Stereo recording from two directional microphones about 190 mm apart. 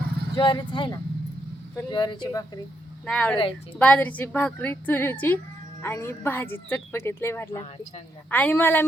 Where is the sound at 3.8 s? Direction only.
5° left (ahead or behind).